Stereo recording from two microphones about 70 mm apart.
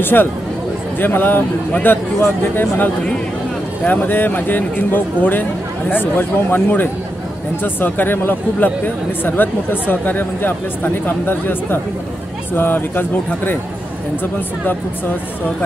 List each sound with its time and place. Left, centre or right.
0.0 s speech: left